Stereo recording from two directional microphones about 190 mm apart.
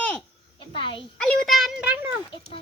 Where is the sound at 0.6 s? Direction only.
25° left (ahead or behind).